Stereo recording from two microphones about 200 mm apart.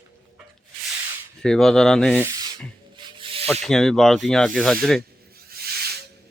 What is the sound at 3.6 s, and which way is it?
Speech, centre (ahead or behind).